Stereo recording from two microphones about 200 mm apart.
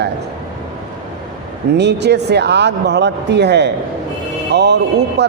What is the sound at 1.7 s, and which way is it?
A man's voice, 55° right (ahead or behind).